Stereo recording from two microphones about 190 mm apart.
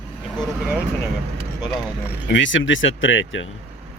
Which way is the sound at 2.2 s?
75° left (ahead or behind).